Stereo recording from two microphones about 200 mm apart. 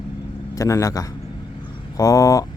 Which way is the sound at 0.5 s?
15° left (ahead or behind).